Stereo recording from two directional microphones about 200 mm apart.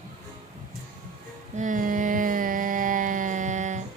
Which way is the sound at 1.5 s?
40° right (ahead or behind).